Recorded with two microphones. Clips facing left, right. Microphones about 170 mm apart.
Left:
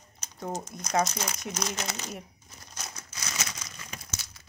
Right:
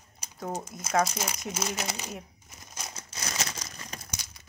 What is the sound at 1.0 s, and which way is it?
Speech, 10° right (ahead or behind).